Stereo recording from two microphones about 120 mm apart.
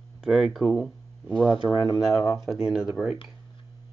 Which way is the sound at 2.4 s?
5° right (ahead or behind).